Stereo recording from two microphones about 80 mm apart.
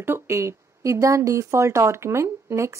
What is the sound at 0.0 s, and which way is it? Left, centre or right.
Speech, right.